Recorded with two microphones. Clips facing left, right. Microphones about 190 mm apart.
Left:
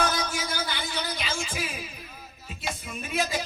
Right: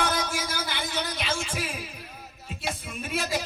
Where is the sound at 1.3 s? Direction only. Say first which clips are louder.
Right 2 dB; 70° right (ahead or behind).